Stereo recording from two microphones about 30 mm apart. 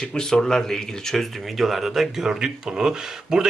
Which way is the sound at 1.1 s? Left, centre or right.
Centre.